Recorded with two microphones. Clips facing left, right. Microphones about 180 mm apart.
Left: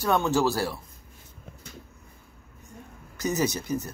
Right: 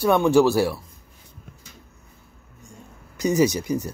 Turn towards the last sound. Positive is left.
turn(degrees=-10)  # may be behind; listen again after turning